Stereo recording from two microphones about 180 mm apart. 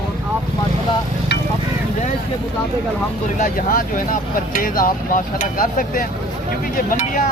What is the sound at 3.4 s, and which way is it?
Speech, 50° left (ahead or behind).